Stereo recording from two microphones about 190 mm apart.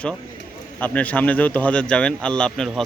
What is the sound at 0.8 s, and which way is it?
Speech, 10° left (ahead or behind).